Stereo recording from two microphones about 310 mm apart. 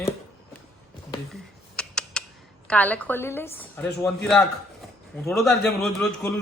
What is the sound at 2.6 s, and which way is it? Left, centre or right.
A woman's voice, centre.